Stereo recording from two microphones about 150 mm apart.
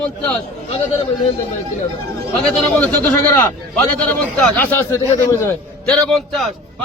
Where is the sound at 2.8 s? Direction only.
15° left (ahead or behind).